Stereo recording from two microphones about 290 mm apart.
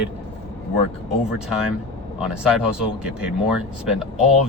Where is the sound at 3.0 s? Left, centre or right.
Centre.